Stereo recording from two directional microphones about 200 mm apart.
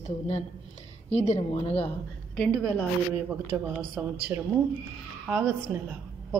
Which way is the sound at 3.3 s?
5° right (ahead or behind).